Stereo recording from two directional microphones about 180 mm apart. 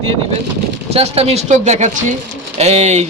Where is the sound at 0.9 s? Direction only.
35° right (ahead or behind).